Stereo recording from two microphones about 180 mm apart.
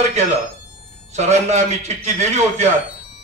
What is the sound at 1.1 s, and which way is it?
Mantra, 40° right (ahead or behind).